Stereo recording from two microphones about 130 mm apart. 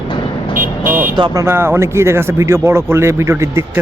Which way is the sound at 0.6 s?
90° right.